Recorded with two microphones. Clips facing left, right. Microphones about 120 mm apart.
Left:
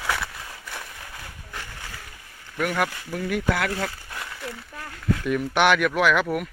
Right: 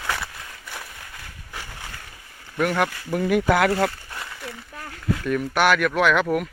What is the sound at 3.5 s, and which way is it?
Speech, 65° right (ahead or behind).